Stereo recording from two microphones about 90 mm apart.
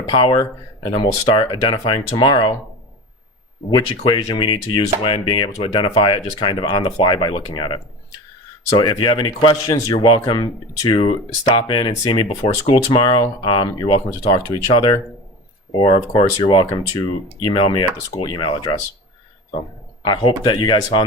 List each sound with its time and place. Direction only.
0.1 s speech: 85° left
0.9 s speech: 60° left (ahead or behind)
3.7 s speech: 50° left (ahead or behind)
8.8 s speech: 60° left (ahead or behind)
14.3 s speech: 40° left (ahead or behind)
14.7 s speech: 60° left (ahead or behind)
15.8 s speech: 70° left (ahead or behind)
20.1 s speech: 55° left (ahead or behind)